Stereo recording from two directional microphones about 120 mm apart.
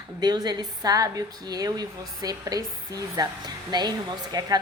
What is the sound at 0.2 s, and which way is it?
A woman's voice, 35° right (ahead or behind).